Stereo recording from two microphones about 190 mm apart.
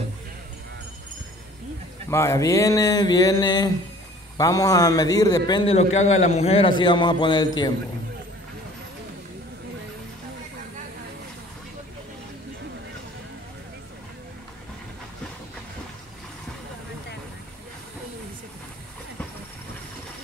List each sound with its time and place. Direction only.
2.0 s a man's voice: 15° left (ahead or behind)
5.7 s a man's voice: 35° left (ahead or behind)